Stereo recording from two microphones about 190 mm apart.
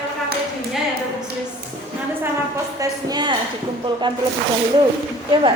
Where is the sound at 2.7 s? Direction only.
20° right (ahead or behind).